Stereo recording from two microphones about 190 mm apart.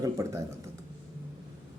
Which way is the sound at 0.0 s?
15° right (ahead or behind).